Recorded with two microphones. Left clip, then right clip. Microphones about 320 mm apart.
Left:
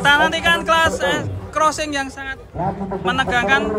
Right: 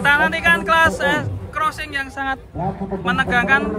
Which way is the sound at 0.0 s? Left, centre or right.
Centre.